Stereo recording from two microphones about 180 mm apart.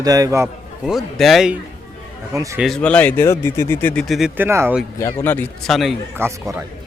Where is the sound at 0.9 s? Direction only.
Centre (ahead or behind).